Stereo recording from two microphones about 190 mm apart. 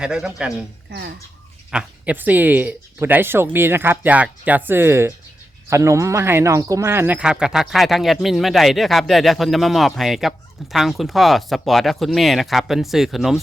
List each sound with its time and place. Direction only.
0.0 s speech: 5° right (ahead or behind)
0.9 s speech: 60° right (ahead or behind)
1.7 s speech: 10° right (ahead or behind)